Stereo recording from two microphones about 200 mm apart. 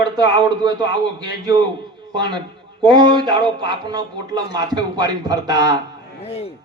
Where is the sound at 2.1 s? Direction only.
20° right (ahead or behind).